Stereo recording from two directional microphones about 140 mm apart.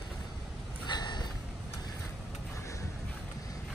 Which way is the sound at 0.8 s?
30° left (ahead or behind).